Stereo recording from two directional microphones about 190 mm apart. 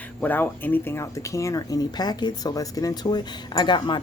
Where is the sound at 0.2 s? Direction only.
10° left (ahead or behind).